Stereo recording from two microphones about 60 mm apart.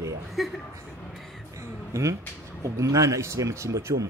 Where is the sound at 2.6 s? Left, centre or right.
Right.